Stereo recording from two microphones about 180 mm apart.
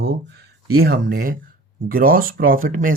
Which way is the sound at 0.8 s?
55° right (ahead or behind).